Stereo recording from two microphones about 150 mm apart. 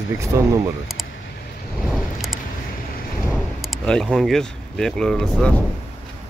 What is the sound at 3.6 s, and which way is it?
Speech, 5° left (ahead or behind).